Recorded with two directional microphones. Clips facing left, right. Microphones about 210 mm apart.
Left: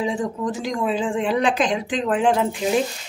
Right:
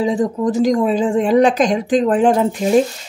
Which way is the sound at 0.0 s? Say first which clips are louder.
Right 7 dB; 35° right (ahead or behind).